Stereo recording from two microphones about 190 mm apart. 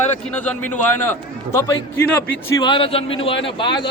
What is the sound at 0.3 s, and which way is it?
Speech, 10° left (ahead or behind).